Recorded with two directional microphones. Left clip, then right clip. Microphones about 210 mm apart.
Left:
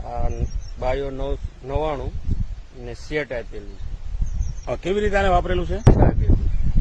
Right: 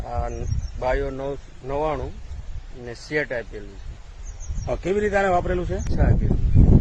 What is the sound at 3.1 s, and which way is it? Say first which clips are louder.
Speech: right 1 dB; centre (ahead or behind).